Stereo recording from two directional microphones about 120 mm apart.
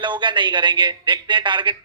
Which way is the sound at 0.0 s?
40° right (ahead or behind).